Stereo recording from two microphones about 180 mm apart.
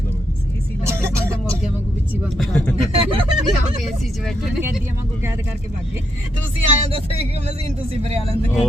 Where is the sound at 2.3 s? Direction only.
5° left (ahead or behind).